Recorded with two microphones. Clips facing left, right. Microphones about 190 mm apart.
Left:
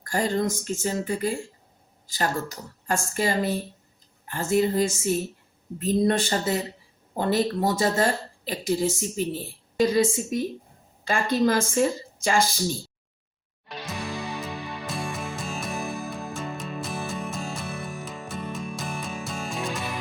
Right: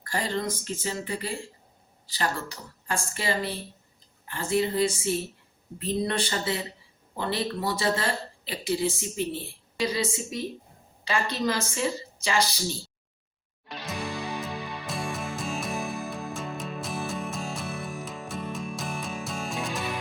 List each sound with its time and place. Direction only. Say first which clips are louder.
0.0 s speech: left 5 dB; 45° left (ahead or behind)
13.7 s music: left 1 dB; centre (ahead or behind)